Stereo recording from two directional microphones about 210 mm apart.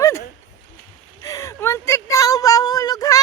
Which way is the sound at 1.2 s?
15° left (ahead or behind).